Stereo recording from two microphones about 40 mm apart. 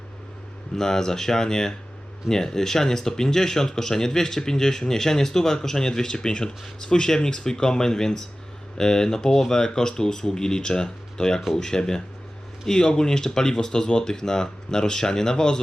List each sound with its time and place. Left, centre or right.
0.8 s speech: centre